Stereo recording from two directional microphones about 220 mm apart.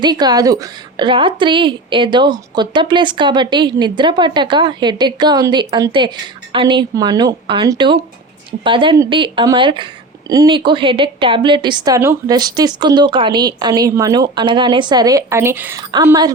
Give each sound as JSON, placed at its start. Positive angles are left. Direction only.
{"t": 0.0, "sound": "a woman's voice", "side_deg": -20}